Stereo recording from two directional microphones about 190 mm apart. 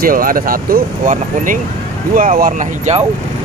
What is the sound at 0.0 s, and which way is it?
Speech, 50° right (ahead or behind).